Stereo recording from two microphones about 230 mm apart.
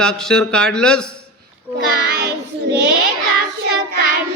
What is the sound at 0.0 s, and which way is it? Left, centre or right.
A child's voice, centre.